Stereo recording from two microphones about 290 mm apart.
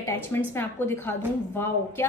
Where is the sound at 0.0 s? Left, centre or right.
Centre.